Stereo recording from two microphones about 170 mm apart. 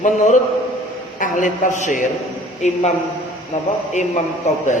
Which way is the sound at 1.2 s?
50° left (ahead or behind).